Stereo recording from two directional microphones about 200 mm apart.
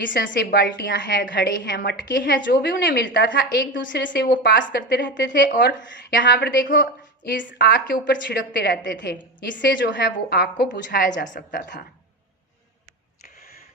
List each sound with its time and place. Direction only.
0.0 s a woman's voice: 65° left (ahead or behind)
0.3 s a woman's voice: 50° left (ahead or behind)
9.0 s a woman's voice: 65° left (ahead or behind)
10.1 s a woman's voice: 50° left (ahead or behind)